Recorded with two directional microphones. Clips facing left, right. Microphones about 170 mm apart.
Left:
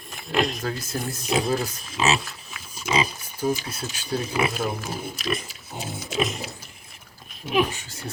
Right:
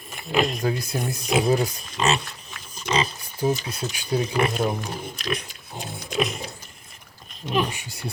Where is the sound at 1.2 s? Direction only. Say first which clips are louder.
Right 2 dB; centre (ahead or behind).